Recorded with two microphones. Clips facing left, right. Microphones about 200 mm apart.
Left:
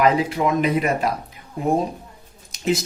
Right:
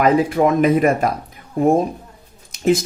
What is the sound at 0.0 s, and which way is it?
Speech, 50° right (ahead or behind).